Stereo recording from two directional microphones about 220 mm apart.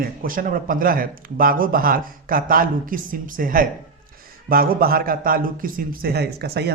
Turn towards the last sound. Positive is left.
turn(degrees=-45)  # may be behind; listen again after turning